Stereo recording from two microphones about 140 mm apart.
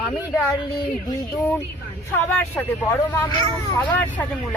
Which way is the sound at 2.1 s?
15° left (ahead or behind).